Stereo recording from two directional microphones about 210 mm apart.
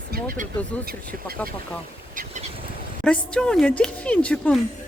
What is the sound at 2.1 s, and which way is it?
Boat, 40° right (ahead or behind).